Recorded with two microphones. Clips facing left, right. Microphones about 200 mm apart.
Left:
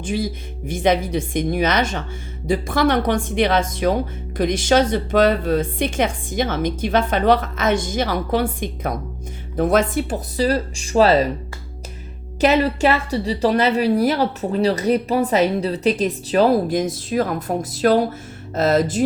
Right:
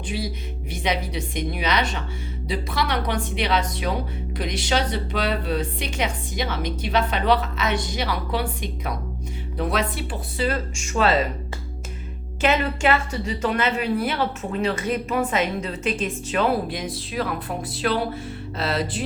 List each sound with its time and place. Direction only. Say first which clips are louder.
0.0 s a woman's voice: left 6 dB; 45° left (ahead or behind)
12.4 s a woman's voice: left 5 dB; 35° left (ahead or behind)